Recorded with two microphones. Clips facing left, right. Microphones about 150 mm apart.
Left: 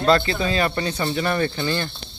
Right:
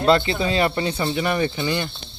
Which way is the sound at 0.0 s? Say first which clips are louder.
Right 1 dB; 20° right (ahead or behind).